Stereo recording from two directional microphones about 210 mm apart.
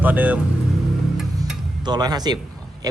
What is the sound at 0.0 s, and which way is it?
Speech, 5° right (ahead or behind).